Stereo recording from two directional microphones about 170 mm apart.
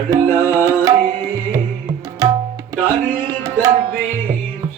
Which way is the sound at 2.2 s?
20° right (ahead or behind).